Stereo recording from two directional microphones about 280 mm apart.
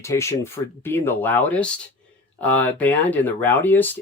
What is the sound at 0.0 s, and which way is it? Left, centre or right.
Speech, centre.